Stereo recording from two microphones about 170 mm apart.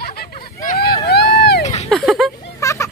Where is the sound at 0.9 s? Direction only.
70° left (ahead or behind).